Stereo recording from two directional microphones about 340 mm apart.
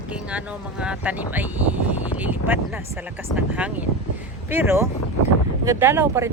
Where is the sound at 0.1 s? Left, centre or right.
Centre.